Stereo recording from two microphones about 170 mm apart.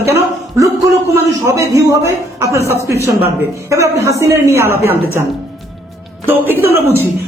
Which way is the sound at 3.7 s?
20° right (ahead or behind).